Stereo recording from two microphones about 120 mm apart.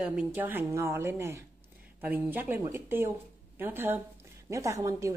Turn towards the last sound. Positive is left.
turn(degrees=-25)  # may be behind; listen again after turning